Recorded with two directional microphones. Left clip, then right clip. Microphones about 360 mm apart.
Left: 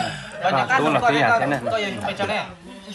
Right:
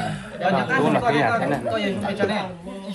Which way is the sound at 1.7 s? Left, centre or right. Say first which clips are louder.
Left 1 dB; centre.